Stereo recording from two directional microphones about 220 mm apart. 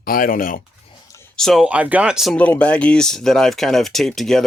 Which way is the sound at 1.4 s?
Centre (ahead or behind).